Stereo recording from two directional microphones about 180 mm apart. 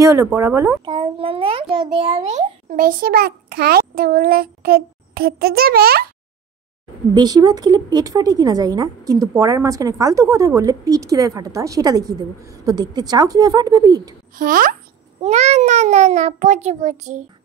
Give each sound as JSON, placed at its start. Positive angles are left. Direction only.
{"t": 0.0, "sound": "speech", "side_deg": -15}
{"t": 0.8, "sound": "a child's voice", "side_deg": -25}
{"t": 7.2, "sound": "a woman's voice", "side_deg": -20}
{"t": 14.3, "sound": "a child's voice", "side_deg": -50}
{"t": 15.2, "sound": "a child's voice", "side_deg": -40}